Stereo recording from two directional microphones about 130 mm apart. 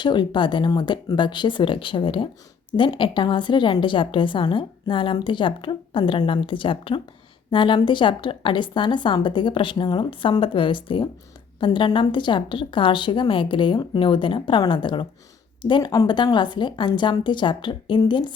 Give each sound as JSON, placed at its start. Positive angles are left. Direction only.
{"t": 0.0, "sound": "a woman's voice", "side_deg": 35}